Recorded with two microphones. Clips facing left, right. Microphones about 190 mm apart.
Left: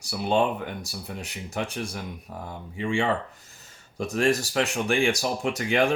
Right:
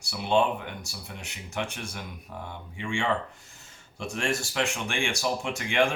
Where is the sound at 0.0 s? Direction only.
40° left (ahead or behind).